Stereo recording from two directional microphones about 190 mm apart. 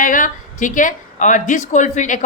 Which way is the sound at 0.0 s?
45° left (ahead or behind).